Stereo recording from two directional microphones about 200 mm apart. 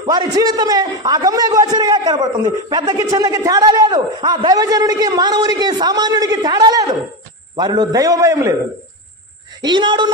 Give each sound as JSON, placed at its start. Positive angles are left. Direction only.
{"t": 0.0, "sound": "a man's voice", "side_deg": -20}
{"t": 9.6, "sound": "a man's voice", "side_deg": -20}